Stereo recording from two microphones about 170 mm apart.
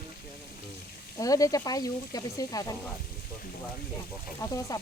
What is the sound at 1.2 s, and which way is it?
Speech, 20° left (ahead or behind).